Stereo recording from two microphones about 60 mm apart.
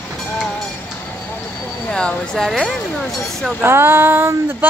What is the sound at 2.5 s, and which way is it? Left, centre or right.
Speech, centre.